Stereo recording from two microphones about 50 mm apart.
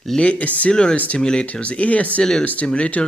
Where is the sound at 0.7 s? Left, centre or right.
Centre.